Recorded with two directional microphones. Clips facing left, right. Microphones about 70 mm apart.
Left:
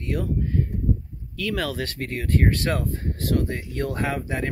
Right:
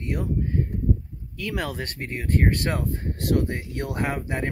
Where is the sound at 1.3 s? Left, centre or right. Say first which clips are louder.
Left 3 dB; right.